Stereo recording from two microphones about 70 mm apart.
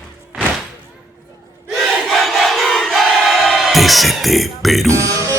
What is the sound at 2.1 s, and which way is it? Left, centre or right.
Crowd, centre.